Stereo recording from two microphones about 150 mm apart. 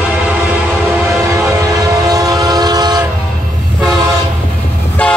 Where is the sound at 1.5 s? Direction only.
20° right (ahead or behind).